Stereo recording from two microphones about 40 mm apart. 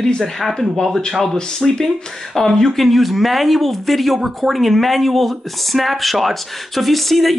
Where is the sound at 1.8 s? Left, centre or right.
Centre.